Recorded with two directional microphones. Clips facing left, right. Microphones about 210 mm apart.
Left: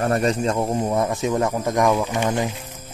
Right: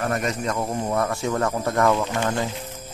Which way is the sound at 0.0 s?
30° left (ahead or behind).